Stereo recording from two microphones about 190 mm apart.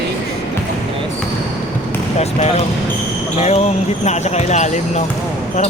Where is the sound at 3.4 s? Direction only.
35° left (ahead or behind).